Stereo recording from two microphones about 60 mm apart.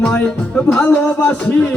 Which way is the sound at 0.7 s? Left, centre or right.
Left.